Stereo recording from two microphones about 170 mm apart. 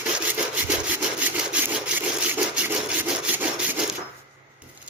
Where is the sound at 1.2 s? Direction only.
10° right (ahead or behind).